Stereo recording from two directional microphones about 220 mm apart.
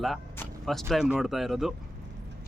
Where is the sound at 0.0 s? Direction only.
Centre (ahead or behind).